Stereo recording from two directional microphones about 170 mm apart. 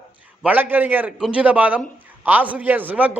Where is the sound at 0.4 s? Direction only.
10° right (ahead or behind).